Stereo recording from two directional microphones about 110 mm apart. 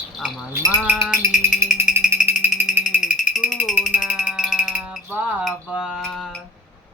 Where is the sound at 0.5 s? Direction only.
20° right (ahead or behind).